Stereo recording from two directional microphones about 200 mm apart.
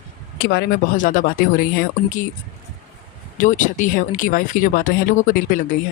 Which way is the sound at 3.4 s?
40° left (ahead or behind).